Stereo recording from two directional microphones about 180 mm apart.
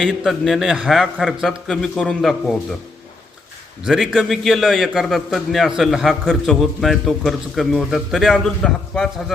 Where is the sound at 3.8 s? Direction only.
Centre (ahead or behind).